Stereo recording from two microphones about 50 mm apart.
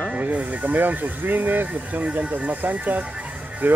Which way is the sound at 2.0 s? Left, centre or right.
Right.